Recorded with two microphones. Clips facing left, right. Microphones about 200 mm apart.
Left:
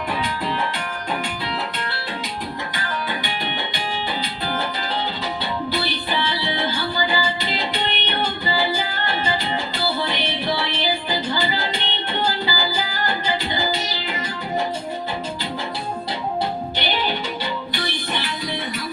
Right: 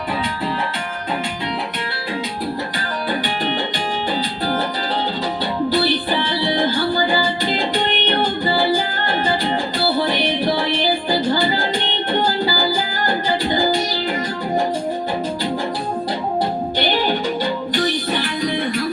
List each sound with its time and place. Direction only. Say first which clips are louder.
5.7 s music: right 6 dB; 45° right (ahead or behind)
10.0 s music: right 6 dB; 45° right (ahead or behind)
16.7 s music: right 5 dB; 45° right (ahead or behind)